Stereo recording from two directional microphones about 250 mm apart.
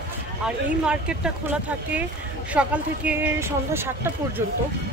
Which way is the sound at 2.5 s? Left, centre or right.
Centre.